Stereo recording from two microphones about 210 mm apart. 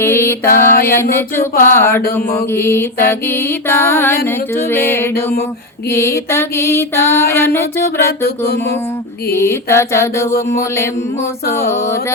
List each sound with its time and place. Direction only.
0.0 s mantra: 10° left (ahead or behind)
0.4 s mantra: 45° left (ahead or behind)
1.1 s mantra: 10° left (ahead or behind)
8.2 s mantra: 50° left (ahead or behind)
9.3 s mantra: 10° left (ahead or behind)